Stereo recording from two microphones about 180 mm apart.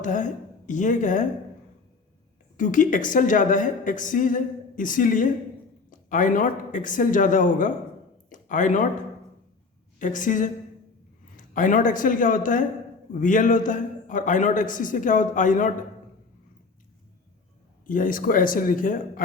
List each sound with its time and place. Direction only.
0.0 s a woman's voice: 45° left (ahead or behind)
2.6 s a woman's voice: 45° left (ahead or behind)
10.0 s a woman's voice: 45° left (ahead or behind)
17.8 s a woman's voice: 45° left (ahead or behind)